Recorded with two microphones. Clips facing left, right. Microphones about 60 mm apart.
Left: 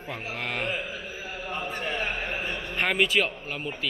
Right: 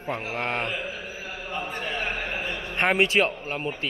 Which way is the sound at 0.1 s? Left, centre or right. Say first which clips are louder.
Right 4 dB; right.